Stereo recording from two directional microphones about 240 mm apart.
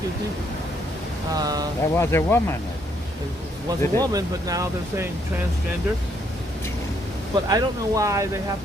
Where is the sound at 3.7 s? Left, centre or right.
Centre.